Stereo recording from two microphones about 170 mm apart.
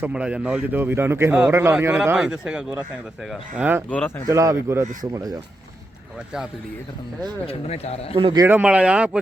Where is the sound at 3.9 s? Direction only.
10° left (ahead or behind).